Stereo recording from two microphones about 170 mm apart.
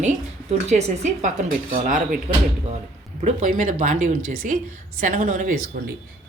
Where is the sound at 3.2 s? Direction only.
45° right (ahead or behind).